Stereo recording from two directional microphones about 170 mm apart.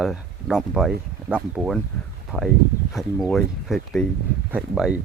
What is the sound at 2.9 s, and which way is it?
Speech, centre (ahead or behind).